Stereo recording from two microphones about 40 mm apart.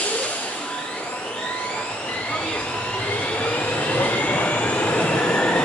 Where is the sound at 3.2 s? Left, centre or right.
Left.